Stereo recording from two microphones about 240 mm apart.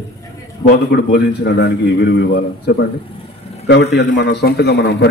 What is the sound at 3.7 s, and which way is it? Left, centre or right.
A man's voice, left.